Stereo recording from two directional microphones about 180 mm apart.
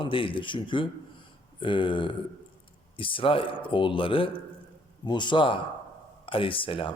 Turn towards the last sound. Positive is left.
turn(degrees=30)  # may be behind; listen again after turning